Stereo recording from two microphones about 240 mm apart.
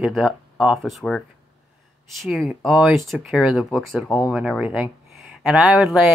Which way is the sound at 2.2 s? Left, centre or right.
Centre.